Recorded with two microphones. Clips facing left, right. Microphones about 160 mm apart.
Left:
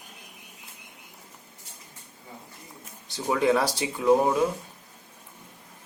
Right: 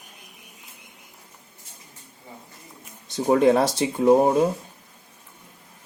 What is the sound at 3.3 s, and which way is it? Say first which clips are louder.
Speech: right 5 dB; 25° right (ahead or behind).